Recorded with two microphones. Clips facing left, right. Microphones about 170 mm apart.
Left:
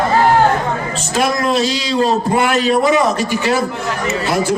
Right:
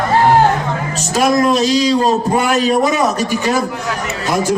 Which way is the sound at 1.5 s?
40° right (ahead or behind).